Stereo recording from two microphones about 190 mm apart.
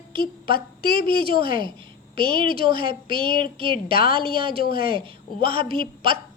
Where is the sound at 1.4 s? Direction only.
25° right (ahead or behind).